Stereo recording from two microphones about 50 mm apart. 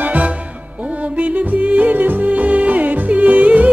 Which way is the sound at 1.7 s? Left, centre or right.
Right.